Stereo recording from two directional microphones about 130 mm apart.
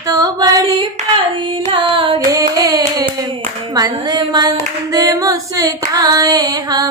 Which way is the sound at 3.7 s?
30° right (ahead or behind).